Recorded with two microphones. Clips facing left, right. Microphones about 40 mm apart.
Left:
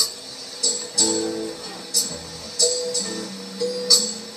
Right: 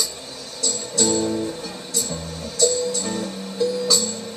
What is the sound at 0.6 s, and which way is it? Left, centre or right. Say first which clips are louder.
Music: right 3 dB; right.